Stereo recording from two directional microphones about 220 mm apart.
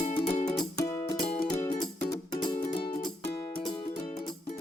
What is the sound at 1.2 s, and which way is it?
Music, 40° left (ahead or behind).